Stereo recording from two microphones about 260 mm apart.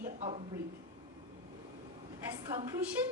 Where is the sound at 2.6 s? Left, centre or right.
Centre.